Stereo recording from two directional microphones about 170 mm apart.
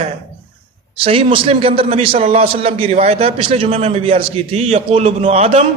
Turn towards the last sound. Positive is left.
turn(degrees=-40)  # may be behind; listen again after turning